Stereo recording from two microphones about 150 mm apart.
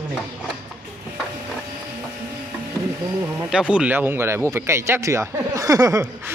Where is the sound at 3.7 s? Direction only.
10° right (ahead or behind).